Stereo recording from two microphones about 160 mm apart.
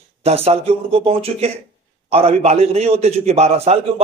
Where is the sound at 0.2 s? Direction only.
40° right (ahead or behind).